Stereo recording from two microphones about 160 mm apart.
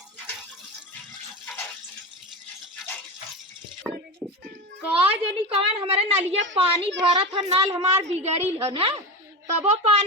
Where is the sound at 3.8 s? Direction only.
10° right (ahead or behind).